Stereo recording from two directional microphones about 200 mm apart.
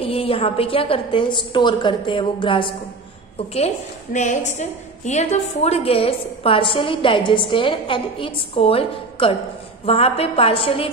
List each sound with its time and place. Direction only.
0.0 s a woman's voice: 30° left (ahead or behind)